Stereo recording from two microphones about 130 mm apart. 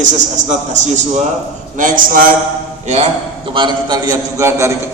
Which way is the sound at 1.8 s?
90° right.